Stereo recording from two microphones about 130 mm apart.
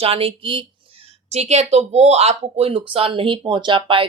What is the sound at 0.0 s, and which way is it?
Speech, 45° right (ahead or behind).